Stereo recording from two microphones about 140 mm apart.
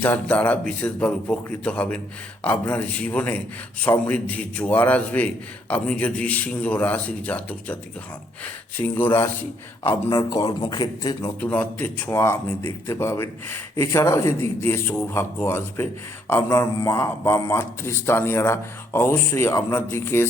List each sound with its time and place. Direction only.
0.0 s a man's voice: 10° left (ahead or behind)
9.0 s a man's voice: 15° left (ahead or behind)
10.1 s speech: 30° left (ahead or behind)
11.3 s a man's voice: 10° left (ahead or behind)